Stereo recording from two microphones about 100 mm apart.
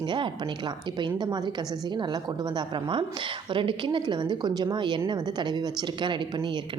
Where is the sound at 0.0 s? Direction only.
55° right (ahead or behind).